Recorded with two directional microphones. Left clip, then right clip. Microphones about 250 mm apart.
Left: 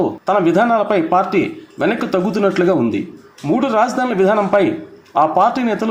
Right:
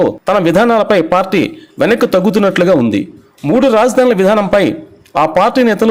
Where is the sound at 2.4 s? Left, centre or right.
Right.